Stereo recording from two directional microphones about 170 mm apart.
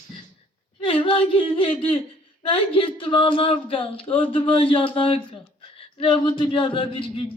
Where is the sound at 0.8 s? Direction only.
30° left (ahead or behind).